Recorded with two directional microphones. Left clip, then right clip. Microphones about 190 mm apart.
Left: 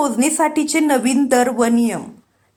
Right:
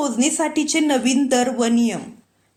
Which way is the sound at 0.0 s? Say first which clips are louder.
Left 4 dB; 10° left (ahead or behind).